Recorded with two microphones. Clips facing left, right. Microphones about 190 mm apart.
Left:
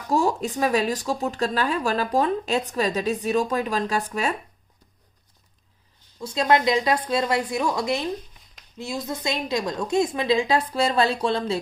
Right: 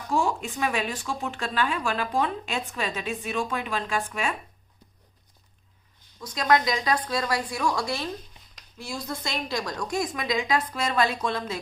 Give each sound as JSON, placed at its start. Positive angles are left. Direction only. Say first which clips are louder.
{"t": 0.1, "sound": "speech", "louder": "left 4 dB", "side_deg": 40}
{"t": 6.1, "sound": "a woman's voice", "louder": "left 3 dB", "side_deg": 25}